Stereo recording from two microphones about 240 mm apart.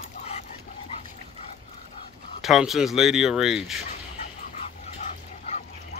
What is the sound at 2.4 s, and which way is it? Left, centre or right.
Speech, centre.